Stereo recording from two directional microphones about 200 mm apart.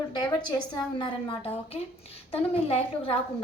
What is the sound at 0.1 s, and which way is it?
A woman's voice, 20° left (ahead or behind).